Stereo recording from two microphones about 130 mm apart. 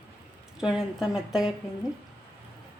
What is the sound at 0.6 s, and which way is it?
Speech, 5° right (ahead or behind).